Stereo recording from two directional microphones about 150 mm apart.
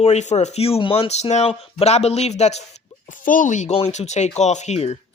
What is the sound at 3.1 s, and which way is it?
Speech, 60° left (ahead or behind).